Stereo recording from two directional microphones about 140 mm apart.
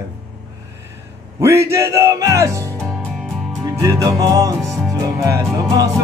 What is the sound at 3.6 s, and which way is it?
Speech, 20° right (ahead or behind).